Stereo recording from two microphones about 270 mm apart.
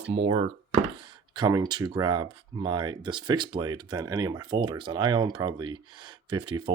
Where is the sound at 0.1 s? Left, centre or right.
Right.